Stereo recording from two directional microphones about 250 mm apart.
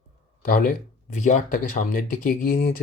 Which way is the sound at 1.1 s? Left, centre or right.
Left.